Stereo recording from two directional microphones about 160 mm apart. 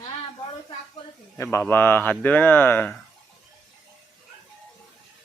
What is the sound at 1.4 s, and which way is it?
Speech, 15° left (ahead or behind).